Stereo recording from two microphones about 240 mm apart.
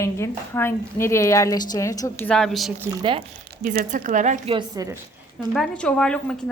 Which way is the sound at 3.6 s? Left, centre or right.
Right.